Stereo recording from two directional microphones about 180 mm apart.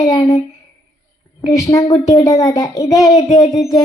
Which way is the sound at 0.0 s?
20° left (ahead or behind).